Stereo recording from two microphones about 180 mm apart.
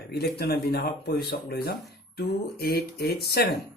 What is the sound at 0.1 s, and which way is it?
A man's voice, 60° left (ahead or behind).